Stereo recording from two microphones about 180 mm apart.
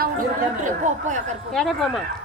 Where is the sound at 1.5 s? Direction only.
Centre (ahead or behind).